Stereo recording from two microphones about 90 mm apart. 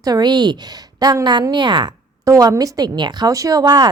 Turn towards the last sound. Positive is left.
turn(degrees=-45)  # may be behind; listen again after turning